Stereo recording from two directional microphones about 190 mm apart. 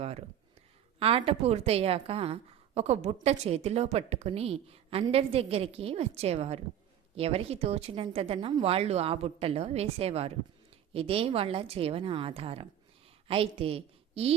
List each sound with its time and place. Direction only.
0.9 s a woman's voice: 30° right (ahead or behind)